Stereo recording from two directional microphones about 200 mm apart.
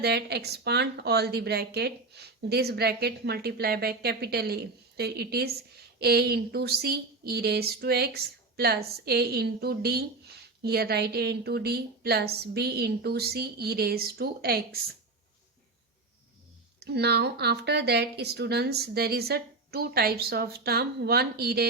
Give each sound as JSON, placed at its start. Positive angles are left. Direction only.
{"t": 0.0, "sound": "speech", "side_deg": -55}
{"t": 16.8, "sound": "speech", "side_deg": -55}